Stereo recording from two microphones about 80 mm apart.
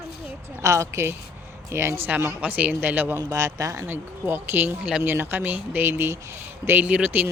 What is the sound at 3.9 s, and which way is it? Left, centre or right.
Speech, right.